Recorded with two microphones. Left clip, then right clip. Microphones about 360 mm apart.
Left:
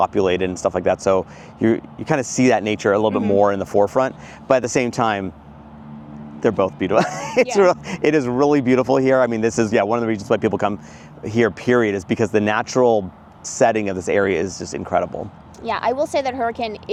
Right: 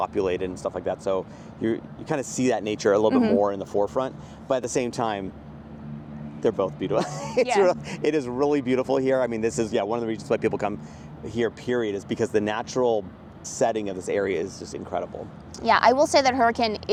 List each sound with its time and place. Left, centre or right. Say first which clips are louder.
0.0 s speech: left 7 dB; left
3.3 s speech: left 7 dB; left
6.4 s speech: left 6 dB; left
11.2 s speech: left 8 dB; left
15.6 s speech: right 2 dB; right